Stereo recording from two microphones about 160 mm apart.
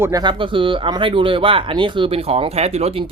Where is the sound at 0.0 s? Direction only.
25° right (ahead or behind).